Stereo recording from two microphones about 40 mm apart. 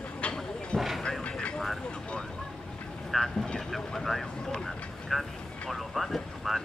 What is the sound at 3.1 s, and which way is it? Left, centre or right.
Vehicle, centre.